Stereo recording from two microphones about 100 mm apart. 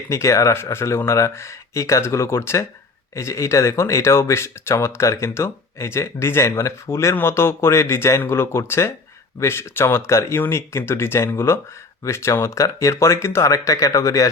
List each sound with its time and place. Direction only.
0.1 s speech: 30° left (ahead or behind)